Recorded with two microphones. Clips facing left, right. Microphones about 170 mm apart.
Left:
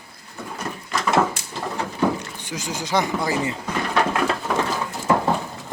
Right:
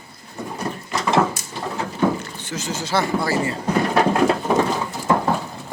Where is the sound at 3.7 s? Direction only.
35° right (ahead or behind).